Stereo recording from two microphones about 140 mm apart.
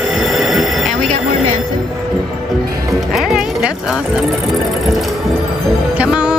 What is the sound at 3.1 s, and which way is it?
Music, 5° right (ahead or behind).